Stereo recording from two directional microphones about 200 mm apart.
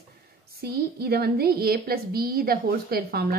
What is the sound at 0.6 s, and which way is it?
A woman's voice, 50° right (ahead or behind).